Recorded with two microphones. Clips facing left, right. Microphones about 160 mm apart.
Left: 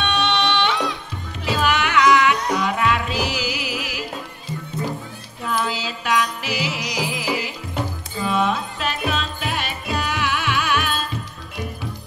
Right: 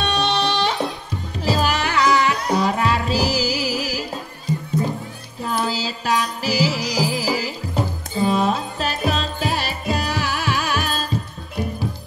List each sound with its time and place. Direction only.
0.0 s music: 35° right (ahead or behind)
5.4 s music: 35° right (ahead or behind)